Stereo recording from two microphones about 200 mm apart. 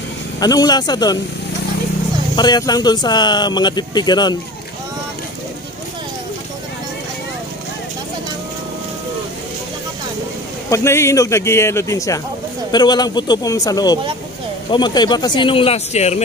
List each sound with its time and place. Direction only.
0.4 s speech: 20° left (ahead or behind)
2.3 s speech: 20° left (ahead or behind)
10.7 s a man's voice: 15° left (ahead or behind); by 16.2 s 35° left (ahead or behind)